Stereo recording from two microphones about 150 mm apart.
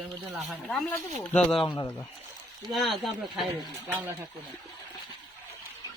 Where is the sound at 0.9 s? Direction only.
10° left (ahead or behind).